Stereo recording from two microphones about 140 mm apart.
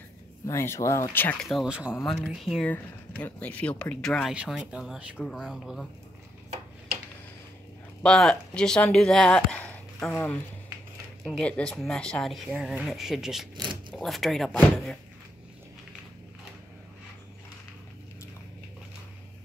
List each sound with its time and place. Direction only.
0.5 s speech: 20° left (ahead or behind)
1.4 s speech: centre (ahead or behind)
2.6 s speech: 10° left (ahead or behind)
8.0 s speech: 5° left (ahead or behind)
13.6 s zipper: 35° right (ahead or behind)
13.9 s speech: centre (ahead or behind)